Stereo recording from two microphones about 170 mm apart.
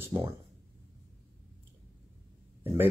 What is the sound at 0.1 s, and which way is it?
Speech, 20° right (ahead or behind).